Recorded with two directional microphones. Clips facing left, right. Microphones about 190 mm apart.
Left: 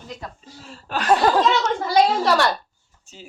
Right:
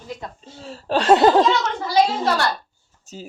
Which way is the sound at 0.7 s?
30° right (ahead or behind).